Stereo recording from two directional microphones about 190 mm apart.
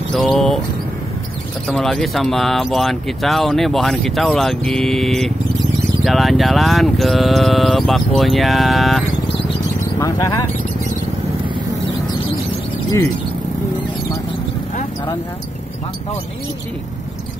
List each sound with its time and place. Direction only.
0.1 s a sound: centre (ahead or behind)
1.7 s speech: centre (ahead or behind)
9.9 s speech: 20° left (ahead or behind)